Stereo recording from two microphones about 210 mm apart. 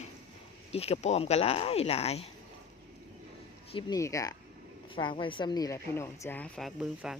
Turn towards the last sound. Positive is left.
turn(degrees=0)  # may be behind; listen again after turning